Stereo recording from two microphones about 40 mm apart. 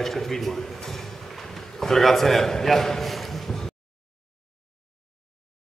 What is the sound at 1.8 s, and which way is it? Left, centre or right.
A man's voice, centre.